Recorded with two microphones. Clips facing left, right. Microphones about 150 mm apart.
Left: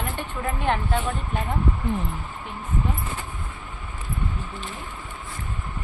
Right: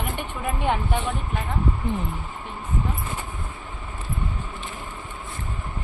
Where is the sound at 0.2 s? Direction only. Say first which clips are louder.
Even; 15° right (ahead or behind).